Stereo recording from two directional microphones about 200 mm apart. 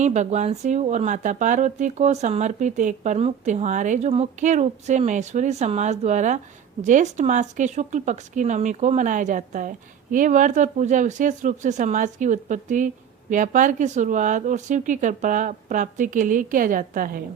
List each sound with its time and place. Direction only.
0.0 s speech: 35° right (ahead or behind)